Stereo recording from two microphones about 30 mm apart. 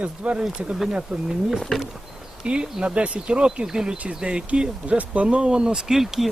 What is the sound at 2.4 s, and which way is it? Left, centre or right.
Speech, right.